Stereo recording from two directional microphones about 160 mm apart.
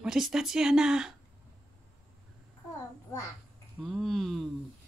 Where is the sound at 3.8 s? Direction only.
Centre (ahead or behind).